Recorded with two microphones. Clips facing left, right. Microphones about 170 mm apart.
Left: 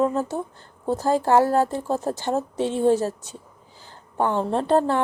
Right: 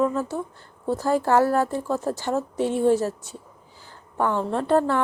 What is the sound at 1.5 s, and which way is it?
Speech, 35° left (ahead or behind).